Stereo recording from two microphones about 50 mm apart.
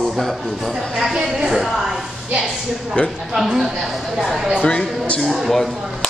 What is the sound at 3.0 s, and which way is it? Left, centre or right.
Speech, left.